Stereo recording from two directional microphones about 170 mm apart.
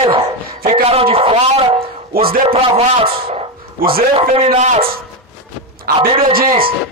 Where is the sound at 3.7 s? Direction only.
60° right (ahead or behind).